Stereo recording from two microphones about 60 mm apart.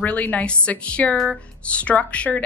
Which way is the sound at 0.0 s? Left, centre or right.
Left.